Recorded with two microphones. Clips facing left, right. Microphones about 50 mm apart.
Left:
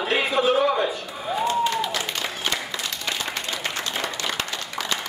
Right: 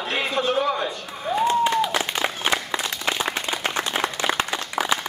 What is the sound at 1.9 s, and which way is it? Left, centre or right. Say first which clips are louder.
Applause: right 4 dB; right.